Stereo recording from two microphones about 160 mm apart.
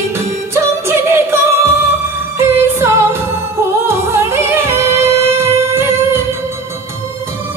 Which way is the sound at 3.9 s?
15° right (ahead or behind).